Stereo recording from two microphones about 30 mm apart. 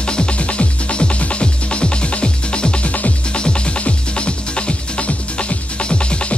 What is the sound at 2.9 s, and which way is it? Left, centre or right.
Music, left.